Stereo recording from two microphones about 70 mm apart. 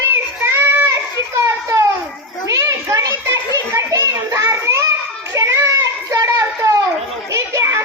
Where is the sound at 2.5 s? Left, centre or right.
Right.